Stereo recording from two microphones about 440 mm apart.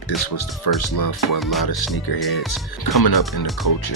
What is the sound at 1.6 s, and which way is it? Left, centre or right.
Speech, left.